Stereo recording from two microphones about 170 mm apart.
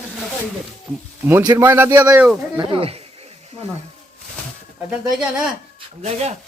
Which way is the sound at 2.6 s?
35° right (ahead or behind).